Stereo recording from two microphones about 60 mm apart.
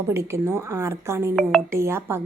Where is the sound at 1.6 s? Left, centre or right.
Right.